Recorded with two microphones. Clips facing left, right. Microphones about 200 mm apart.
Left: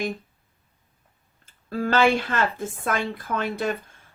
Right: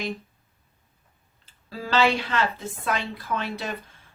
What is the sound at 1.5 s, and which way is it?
Speech, 50° left (ahead or behind).